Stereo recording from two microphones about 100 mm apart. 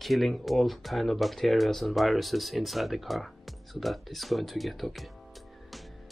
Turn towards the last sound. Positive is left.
turn(degrees=0)  # may be behind; listen again after turning